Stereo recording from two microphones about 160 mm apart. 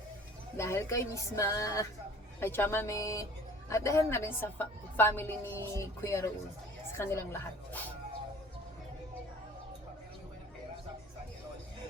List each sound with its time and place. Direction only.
0.5 s music: 15° left (ahead or behind)
2.4 s a woman's voice: 15° left (ahead or behind)